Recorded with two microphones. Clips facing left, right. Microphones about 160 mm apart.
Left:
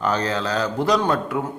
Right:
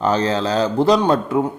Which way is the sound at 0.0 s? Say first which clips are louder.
Right 4 dB; 30° right (ahead or behind).